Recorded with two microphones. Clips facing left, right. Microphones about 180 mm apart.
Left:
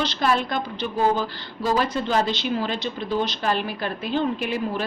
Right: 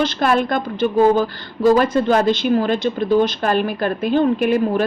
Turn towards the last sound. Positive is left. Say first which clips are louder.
# right 9 dB
turn(degrees=-50)  # may be behind; listen again after turning